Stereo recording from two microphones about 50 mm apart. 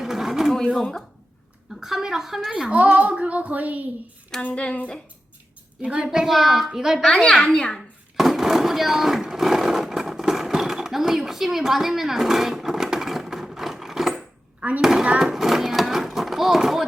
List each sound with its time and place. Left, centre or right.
0.0 s a sound: centre
0.8 s a child's voice: centre
1.8 s a woman's voice: centre
2.5 s a woman's voice: centre
2.7 s child singing: right
4.4 s speech: left
5.8 s child singing: right
6.1 s a child's voice: centre
7.2 s a child's voice: centre
8.1 s a sound: centre
14.8 s a woman's voice: centre
15.2 s a sound: centre